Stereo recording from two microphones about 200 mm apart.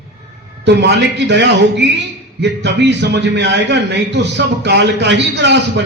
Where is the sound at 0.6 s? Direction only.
60° right (ahead or behind).